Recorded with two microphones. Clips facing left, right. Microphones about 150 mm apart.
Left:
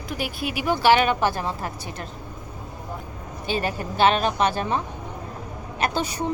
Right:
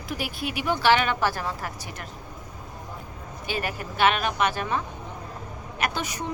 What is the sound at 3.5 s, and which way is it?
A woman's voice, 30° left (ahead or behind).